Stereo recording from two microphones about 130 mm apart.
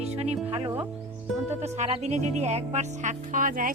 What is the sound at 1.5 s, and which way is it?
Speech, 60° right (ahead or behind).